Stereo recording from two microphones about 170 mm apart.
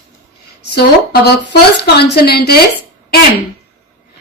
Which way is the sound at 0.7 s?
75° left (ahead or behind).